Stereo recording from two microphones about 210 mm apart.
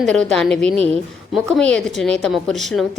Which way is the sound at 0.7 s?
30° right (ahead or behind).